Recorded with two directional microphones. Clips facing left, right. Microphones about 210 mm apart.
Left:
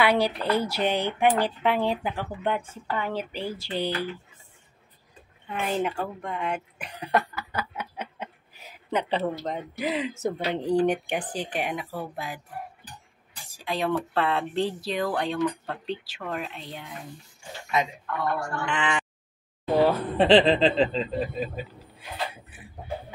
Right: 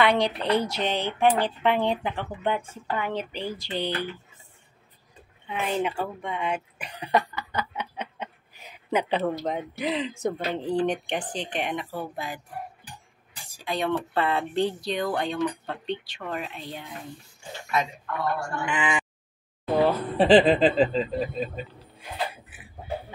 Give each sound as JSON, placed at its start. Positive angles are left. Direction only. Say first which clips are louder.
{"t": 0.0, "sound": "speech", "louder": "even", "side_deg": 5}
{"t": 5.5, "sound": "a sound", "louder": "even", "side_deg": 0}
{"t": 8.9, "sound": "speech", "louder": "right 2 dB", "side_deg": 0}
{"t": 13.5, "sound": "speech", "louder": "even", "side_deg": 0}
{"t": 17.7, "sound": "speech", "louder": "left 1 dB", "side_deg": 20}
{"t": 18.6, "sound": "speech", "louder": "right 1 dB", "side_deg": -10}